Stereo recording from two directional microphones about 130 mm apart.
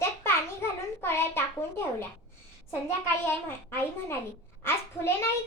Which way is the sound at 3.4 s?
15° left (ahead or behind).